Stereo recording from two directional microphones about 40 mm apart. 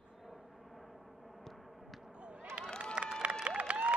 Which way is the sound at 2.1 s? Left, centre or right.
Right.